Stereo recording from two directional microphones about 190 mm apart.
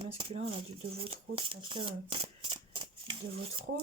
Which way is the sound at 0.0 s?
30° right (ahead or behind).